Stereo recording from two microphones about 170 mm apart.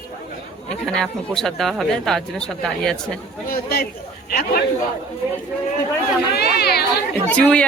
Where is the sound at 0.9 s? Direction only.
Centre (ahead or behind).